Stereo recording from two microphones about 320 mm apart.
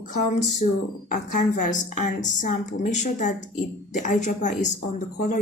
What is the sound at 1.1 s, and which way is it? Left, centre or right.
A woman's voice, left.